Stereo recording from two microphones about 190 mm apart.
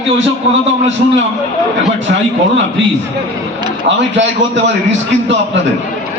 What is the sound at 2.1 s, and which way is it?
Speech, 55° right (ahead or behind).